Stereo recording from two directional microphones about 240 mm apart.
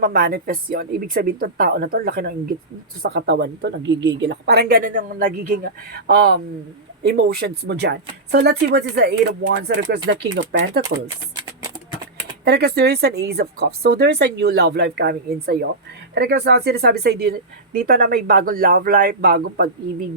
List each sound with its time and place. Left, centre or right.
0.0 s speech: right
12.5 s speech: right